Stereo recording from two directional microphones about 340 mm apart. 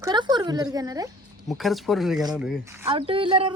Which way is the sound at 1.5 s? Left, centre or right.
Centre.